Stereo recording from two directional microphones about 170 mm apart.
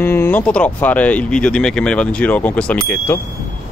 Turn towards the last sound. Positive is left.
turn(degrees=15)  # may be behind; listen again after turning